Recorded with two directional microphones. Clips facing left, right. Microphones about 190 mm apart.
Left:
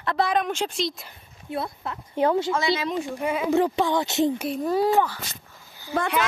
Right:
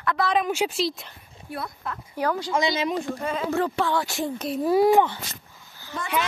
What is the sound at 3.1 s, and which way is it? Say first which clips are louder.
Speech: left 3 dB; 10° left (ahead or behind).